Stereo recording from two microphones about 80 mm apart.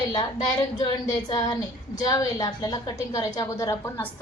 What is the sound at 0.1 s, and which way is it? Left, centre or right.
A woman's voice, left.